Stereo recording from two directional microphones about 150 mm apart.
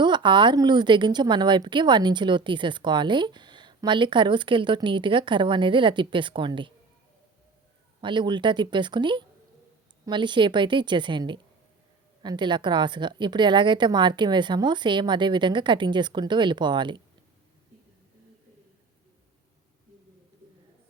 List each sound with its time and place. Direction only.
0.0 s a woman's voice: 30° right (ahead or behind)
8.0 s a woman's voice: 30° right (ahead or behind)